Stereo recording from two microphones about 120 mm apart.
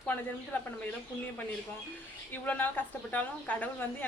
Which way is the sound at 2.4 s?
15° left (ahead or behind).